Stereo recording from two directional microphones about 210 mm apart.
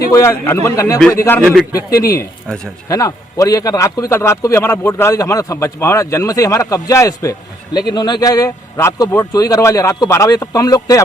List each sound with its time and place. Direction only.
0.1 s a man's voice: 15° left (ahead or behind)